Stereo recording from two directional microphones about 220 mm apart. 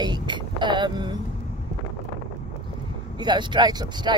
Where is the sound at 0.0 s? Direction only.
20° right (ahead or behind).